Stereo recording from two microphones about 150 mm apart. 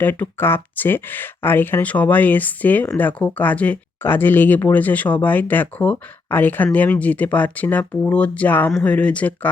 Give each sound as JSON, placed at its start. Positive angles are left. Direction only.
{"t": 0.0, "sound": "speech", "side_deg": 15}